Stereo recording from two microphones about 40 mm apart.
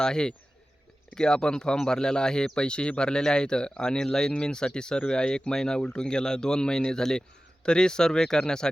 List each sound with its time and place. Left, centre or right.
0.0 s speech: centre